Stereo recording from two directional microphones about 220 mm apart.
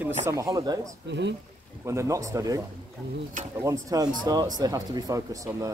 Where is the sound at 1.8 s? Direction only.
15° right (ahead or behind).